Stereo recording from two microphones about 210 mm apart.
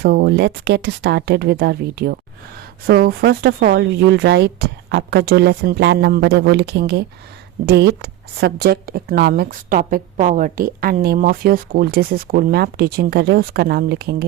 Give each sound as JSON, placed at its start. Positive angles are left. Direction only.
{"t": 0.0, "sound": "a woman's voice", "side_deg": -50}